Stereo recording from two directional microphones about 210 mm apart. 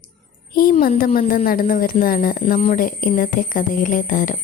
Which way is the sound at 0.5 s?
45° left (ahead or behind).